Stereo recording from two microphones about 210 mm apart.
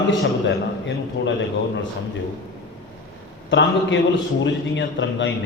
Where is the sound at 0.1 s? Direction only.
60° left (ahead or behind).